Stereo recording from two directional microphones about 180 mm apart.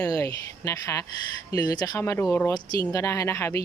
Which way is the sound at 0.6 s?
20° left (ahead or behind).